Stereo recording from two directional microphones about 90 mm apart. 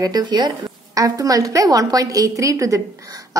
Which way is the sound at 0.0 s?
50° right (ahead or behind).